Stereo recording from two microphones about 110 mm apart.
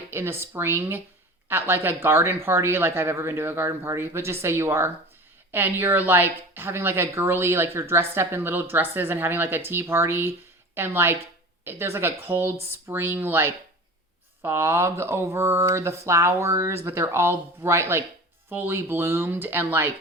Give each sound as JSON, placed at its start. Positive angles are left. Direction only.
{"t": 0.1, "sound": "speech", "side_deg": -20}